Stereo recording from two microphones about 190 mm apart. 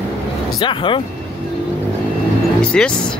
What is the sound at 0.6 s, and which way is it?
Speech, 25° left (ahead or behind).